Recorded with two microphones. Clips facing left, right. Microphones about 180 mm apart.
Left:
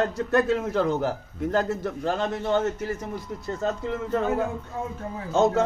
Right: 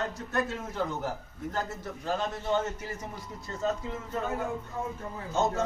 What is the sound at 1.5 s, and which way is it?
Speech, 75° left (ahead or behind).